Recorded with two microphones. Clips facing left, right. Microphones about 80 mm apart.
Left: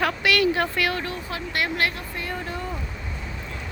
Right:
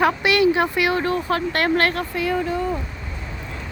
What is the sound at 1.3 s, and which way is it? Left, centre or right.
Speech, right.